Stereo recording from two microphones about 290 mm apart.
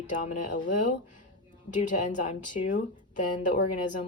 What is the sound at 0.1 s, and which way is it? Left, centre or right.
Speech, left.